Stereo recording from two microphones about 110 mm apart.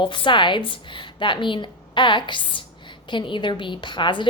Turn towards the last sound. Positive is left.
turn(degrees=45)  # may be behind; listen again after turning